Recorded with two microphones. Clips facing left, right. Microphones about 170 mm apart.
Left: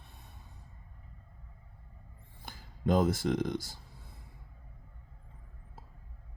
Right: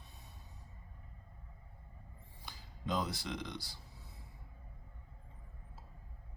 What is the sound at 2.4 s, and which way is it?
Speech, 50° left (ahead or behind).